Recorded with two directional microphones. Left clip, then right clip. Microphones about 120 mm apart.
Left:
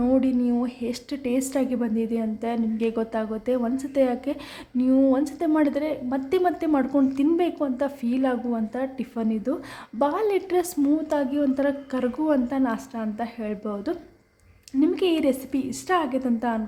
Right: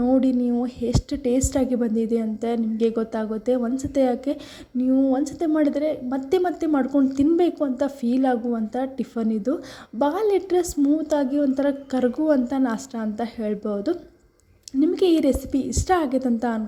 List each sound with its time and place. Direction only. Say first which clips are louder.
0.2 s a woman's voice: right 2 dB; 30° right (ahead or behind)
4.9 s speech: left 1 dB; centre (ahead or behind)
5.1 s a woman's voice: right 1 dB; 20° right (ahead or behind)
6.7 s a woman's voice: right 1 dB; 10° right (ahead or behind)
7.2 s a woman's voice: right 3 dB; 30° right (ahead or behind)
14.9 s a woman's voice: right 3 dB; 30° right (ahead or behind)